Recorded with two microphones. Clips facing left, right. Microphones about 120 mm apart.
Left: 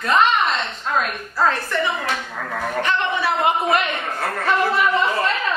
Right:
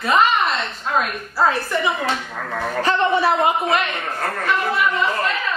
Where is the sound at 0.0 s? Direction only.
5° right (ahead or behind).